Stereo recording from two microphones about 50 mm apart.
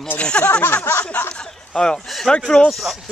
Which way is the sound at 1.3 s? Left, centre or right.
Centre.